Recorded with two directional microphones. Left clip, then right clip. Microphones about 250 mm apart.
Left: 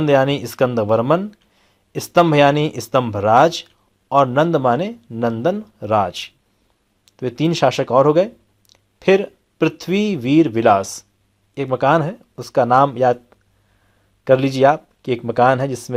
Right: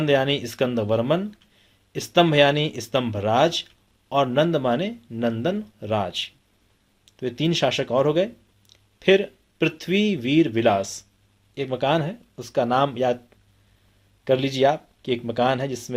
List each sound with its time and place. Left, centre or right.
0.0 s speech: left